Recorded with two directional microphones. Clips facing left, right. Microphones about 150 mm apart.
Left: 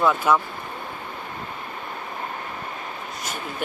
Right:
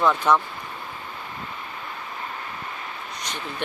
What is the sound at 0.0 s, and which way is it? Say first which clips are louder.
Speech: even; 5° left (ahead or behind).